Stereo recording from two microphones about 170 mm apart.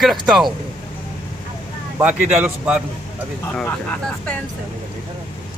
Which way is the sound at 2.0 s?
5° right (ahead or behind).